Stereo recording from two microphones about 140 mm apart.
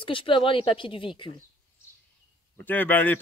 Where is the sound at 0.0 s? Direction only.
40° left (ahead or behind).